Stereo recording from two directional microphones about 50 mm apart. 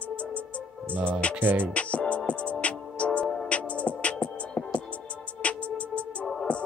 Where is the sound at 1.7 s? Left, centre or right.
Left.